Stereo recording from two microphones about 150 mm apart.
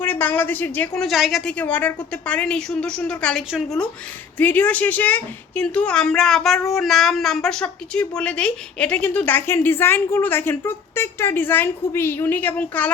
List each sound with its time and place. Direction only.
0.0 s a woman's voice: 10° left (ahead or behind)
1.0 s a woman's voice: centre (ahead or behind)